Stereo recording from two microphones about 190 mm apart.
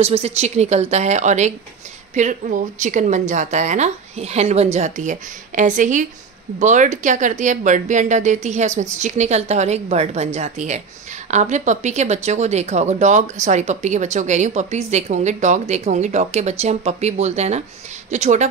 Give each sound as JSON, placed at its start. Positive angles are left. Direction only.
{"t": 0.0, "sound": "speech", "side_deg": -35}